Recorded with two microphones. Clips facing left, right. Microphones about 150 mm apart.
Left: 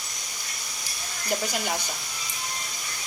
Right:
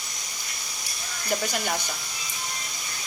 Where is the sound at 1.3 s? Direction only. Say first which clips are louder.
Right 1 dB; 5° left (ahead or behind).